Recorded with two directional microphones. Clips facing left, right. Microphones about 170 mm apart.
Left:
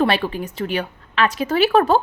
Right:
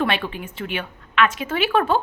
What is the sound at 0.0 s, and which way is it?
A woman's voice, 35° left (ahead or behind).